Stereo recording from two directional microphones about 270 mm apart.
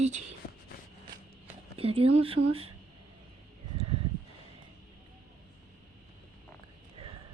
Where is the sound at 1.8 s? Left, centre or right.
Right.